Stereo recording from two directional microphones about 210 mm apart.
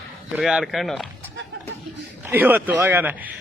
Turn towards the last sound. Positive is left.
turn(degrees=-10)  # may be behind; listen again after turning